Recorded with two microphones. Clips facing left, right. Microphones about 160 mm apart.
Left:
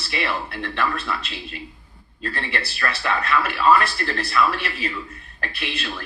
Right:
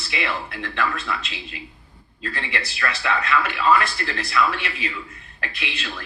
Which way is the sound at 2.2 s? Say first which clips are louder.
Left 1 dB; 35° left (ahead or behind).